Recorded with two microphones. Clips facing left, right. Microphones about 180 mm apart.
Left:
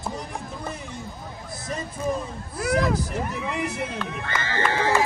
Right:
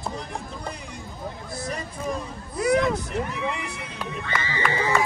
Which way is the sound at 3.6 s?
50° left (ahead or behind).